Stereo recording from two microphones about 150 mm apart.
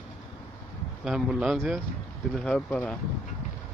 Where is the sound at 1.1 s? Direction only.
5° right (ahead or behind).